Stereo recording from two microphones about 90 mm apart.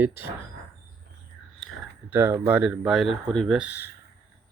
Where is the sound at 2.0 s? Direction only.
25° right (ahead or behind).